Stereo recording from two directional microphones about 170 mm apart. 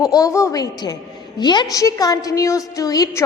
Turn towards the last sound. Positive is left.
turn(degrees=20)  # may be behind; listen again after turning